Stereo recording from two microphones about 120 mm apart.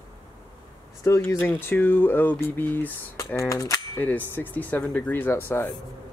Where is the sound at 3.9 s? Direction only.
15° left (ahead or behind).